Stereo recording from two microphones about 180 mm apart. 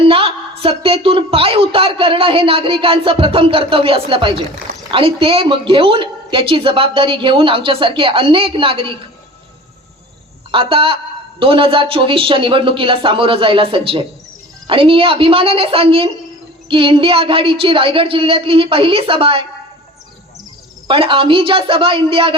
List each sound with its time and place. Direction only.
0.0 s a woman's voice: 30° right (ahead or behind)
10.5 s a woman's voice: 30° right (ahead or behind)
20.8 s a woman's voice: 30° right (ahead or behind)